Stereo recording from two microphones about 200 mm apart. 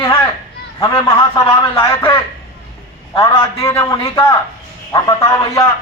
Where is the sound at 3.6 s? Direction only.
15° left (ahead or behind).